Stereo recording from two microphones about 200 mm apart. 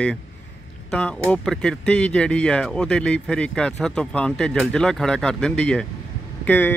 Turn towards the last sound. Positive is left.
turn(degrees=10)  # may be behind; listen again after turning